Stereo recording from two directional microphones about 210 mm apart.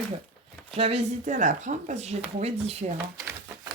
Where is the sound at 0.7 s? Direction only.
30° right (ahead or behind).